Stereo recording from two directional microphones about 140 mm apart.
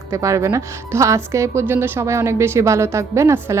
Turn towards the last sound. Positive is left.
turn(degrees=-20)  # may be behind; listen again after turning